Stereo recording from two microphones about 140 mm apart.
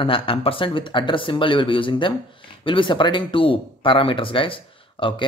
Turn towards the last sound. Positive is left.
turn(degrees=35)  # may be behind; listen again after turning